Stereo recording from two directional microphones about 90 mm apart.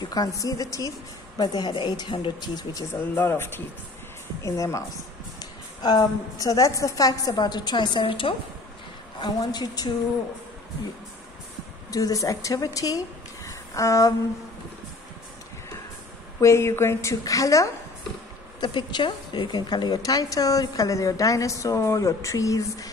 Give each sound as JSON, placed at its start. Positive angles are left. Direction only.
{"t": 0.0, "sound": "a woman's voice", "side_deg": 45}
{"t": 1.4, "sound": "a woman's voice", "side_deg": 55}
{"t": 2.9, "sound": "speech", "side_deg": 25}
{"t": 5.4, "sound": "a woman's voice", "side_deg": 50}
{"t": 9.2, "sound": "a woman's voice", "side_deg": 50}
{"t": 11.9, "sound": "speech", "side_deg": 40}
{"t": 16.3, "sound": "a woman's voice", "side_deg": 30}
{"t": 18.6, "sound": "a woman's voice", "side_deg": 55}